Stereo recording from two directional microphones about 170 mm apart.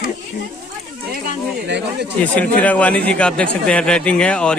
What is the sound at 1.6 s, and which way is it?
Speech, 90° right.